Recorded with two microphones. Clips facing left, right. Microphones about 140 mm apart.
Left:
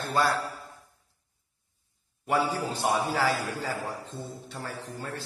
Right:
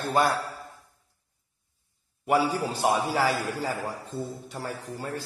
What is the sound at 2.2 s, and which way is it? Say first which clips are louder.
A man's voice: right 3 dB; 10° right (ahead or behind).